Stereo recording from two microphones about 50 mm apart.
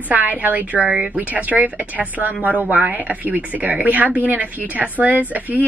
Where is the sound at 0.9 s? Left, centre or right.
Centre.